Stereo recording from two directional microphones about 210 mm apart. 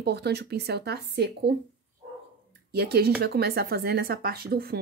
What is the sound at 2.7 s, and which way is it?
Speech, 50° right (ahead or behind).